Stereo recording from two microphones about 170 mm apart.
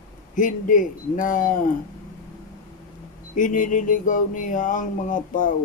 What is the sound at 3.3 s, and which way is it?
Speech, 50° left (ahead or behind).